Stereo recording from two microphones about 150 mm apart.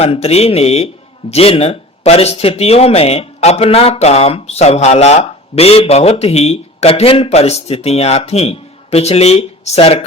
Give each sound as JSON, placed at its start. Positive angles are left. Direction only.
{"t": 0.0, "sound": "speech", "side_deg": 45}